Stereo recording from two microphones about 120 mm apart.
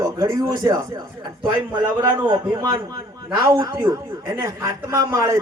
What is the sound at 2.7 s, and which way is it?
A man's voice, 25° right (ahead or behind).